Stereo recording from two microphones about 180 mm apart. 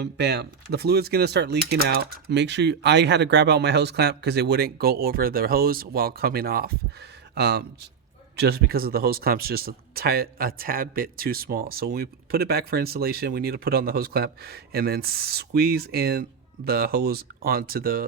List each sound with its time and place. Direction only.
0.0 s speech: 65° right (ahead or behind)